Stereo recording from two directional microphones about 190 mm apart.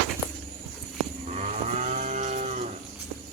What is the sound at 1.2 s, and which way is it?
Moo, 35° right (ahead or behind).